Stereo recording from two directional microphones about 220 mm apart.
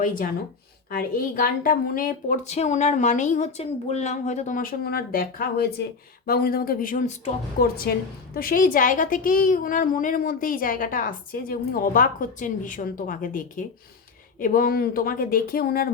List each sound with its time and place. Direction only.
0.0 s a woman's voice: 40° left (ahead or behind)